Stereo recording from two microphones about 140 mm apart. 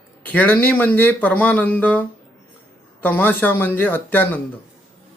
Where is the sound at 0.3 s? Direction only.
10° left (ahead or behind).